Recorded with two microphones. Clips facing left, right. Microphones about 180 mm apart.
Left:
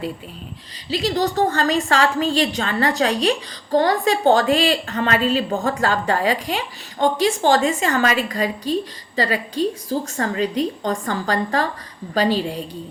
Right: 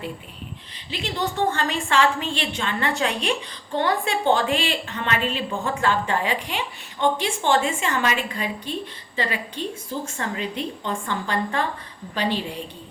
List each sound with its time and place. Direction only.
0.9 s a woman's voice: 35° left (ahead or behind)